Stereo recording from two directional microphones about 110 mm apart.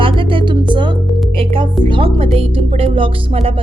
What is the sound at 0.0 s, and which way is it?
Music, 50° right (ahead or behind).